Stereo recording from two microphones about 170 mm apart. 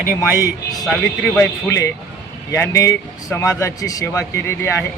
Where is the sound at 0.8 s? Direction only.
5° left (ahead or behind).